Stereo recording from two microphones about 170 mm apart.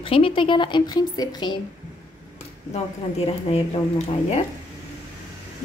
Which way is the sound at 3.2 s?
35° left (ahead or behind).